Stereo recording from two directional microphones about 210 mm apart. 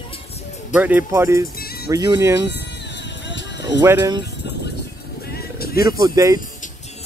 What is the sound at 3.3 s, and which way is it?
Music, 55° left (ahead or behind).